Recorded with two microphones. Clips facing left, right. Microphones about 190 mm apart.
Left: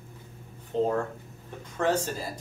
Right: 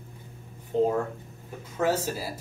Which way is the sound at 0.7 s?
15° right (ahead or behind).